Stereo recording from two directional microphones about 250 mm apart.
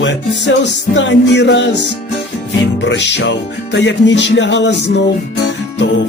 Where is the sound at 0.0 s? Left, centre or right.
Left.